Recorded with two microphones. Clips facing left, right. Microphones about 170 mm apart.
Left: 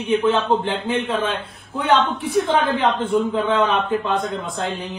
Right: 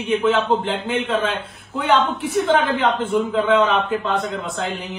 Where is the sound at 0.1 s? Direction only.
Centre (ahead or behind).